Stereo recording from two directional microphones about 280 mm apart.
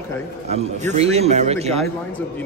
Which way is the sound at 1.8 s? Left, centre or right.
Centre.